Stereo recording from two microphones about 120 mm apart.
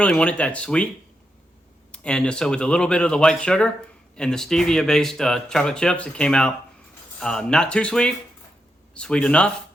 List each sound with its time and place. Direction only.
0.0 s speech: 10° left (ahead or behind)
1.9 s speech: 10° left (ahead or behind)